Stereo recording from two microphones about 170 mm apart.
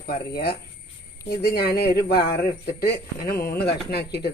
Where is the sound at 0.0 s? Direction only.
65° left (ahead or behind).